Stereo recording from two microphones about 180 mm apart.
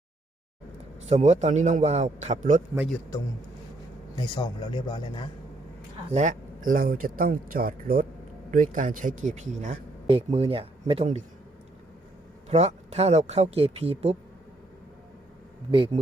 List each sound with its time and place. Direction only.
1.1 s speech: 40° right (ahead or behind)
4.1 s a man's voice: 25° left (ahead or behind)
6.1 s speech: 40° right (ahead or behind)
12.5 s speech: 35° right (ahead or behind)
15.7 s a man's voice: 30° right (ahead or behind)